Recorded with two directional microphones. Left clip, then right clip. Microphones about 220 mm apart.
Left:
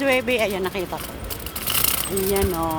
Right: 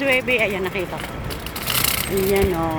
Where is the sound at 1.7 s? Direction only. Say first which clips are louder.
Right 3 dB; 50° left (ahead or behind).